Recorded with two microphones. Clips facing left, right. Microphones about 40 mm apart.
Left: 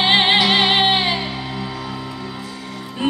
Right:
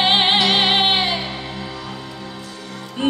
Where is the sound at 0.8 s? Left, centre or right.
Left.